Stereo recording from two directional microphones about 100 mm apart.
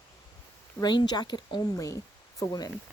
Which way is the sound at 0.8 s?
45° left (ahead or behind).